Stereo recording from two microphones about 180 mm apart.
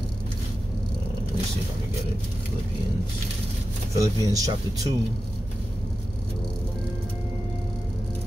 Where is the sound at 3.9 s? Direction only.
20° right (ahead or behind).